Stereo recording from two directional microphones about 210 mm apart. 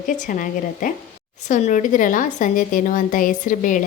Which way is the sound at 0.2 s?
40° left (ahead or behind).